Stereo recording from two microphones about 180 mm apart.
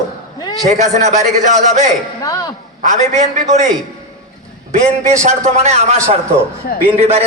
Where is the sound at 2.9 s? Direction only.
40° right (ahead or behind).